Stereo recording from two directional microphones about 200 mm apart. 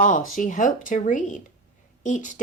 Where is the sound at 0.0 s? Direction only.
40° left (ahead or behind).